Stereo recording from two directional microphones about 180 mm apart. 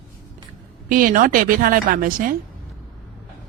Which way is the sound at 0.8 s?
50° right (ahead or behind).